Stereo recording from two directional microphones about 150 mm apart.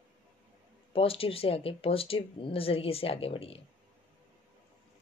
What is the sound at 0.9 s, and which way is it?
Speech, 40° left (ahead or behind).